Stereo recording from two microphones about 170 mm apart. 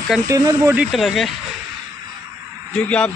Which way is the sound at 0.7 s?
5° right (ahead or behind).